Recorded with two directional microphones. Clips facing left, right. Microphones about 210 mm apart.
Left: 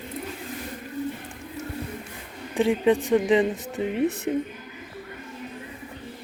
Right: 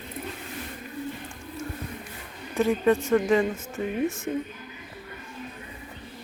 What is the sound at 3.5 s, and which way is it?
Speech, 35° left (ahead or behind).